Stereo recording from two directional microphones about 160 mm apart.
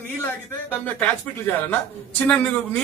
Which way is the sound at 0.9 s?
10° left (ahead or behind).